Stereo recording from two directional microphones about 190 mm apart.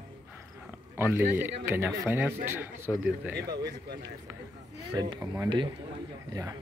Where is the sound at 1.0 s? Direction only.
10° right (ahead or behind).